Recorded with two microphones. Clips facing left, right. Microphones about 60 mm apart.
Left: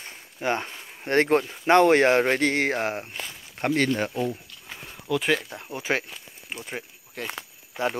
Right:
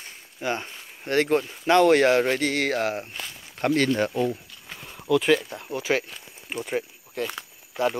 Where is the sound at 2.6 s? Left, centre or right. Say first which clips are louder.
Right 1 dB; left.